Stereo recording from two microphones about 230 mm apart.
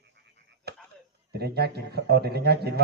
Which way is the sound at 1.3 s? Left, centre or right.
Right.